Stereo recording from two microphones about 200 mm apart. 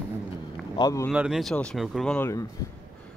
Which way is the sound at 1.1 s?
5° right (ahead or behind).